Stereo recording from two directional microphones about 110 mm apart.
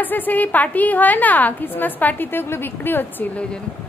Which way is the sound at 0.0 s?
15° left (ahead or behind).